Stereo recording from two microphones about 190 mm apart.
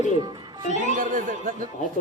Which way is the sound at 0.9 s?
45° right (ahead or behind).